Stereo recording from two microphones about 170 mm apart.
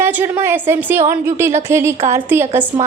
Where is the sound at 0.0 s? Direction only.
10° right (ahead or behind).